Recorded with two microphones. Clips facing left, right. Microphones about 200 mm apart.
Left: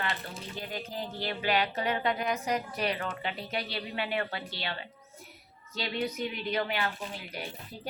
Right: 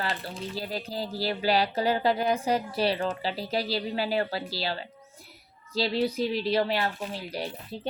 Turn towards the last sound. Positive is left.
turn(degrees=-35)  # may be behind; listen again after turning